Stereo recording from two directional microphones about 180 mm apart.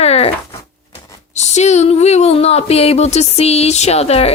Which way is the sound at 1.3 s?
40° left (ahead or behind).